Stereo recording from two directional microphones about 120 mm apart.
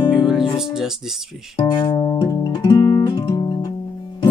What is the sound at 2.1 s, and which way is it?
Music, 30° left (ahead or behind).